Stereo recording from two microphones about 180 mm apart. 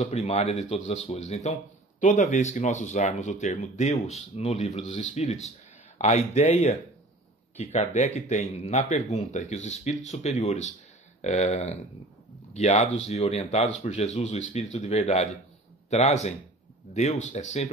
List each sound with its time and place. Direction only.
0.0 s speech: 35° left (ahead or behind)